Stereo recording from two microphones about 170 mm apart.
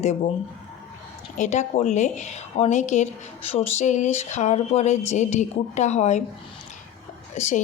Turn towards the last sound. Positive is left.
turn(degrees=45)  # may be behind; listen again after turning